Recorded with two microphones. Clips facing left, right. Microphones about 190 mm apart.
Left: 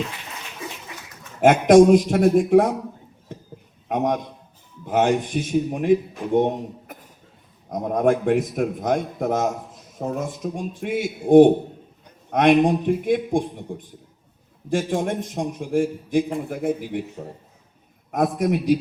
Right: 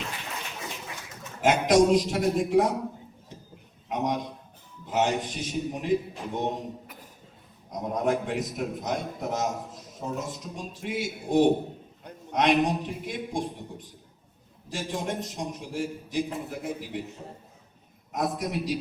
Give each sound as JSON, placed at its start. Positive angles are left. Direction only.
{"t": 1.4, "sound": "a man's voice", "side_deg": 55}
{"t": 3.8, "sound": "a man's voice", "side_deg": 55}
{"t": 14.7, "sound": "a man's voice", "side_deg": 55}
{"t": 18.1, "sound": "a man's voice", "side_deg": 55}